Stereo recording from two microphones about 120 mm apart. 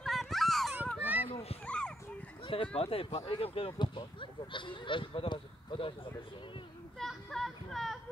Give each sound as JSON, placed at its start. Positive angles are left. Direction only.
{"t": 0.0, "sound": "a sound", "side_deg": 0}
{"t": 1.0, "sound": "children playing", "side_deg": -15}
{"t": 1.3, "sound": "a sound", "side_deg": 60}
{"t": 1.7, "sound": "dog", "side_deg": 10}
{"t": 2.4, "sound": "speech", "side_deg": 50}
{"t": 7.0, "sound": "speech", "side_deg": 0}